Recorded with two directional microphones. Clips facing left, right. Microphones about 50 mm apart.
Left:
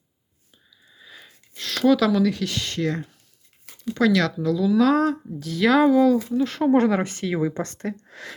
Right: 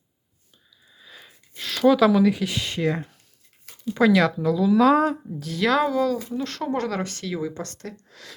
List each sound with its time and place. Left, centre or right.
0.9 s sniff: centre
1.3 s speech: centre
6.7 s a woman's voice: left